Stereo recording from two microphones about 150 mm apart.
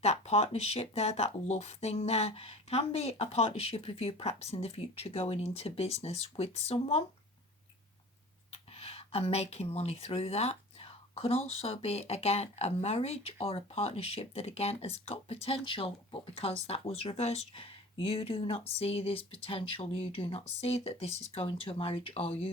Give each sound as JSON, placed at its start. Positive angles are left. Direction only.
{"t": 0.0, "sound": "speech", "side_deg": 45}
{"t": 8.4, "sound": "speech", "side_deg": 40}